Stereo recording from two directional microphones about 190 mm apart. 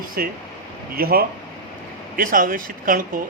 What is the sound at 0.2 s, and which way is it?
A man's voice, 50° right (ahead or behind).